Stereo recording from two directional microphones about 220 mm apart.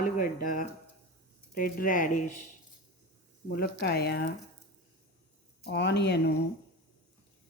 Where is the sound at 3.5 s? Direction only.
45° left (ahead or behind).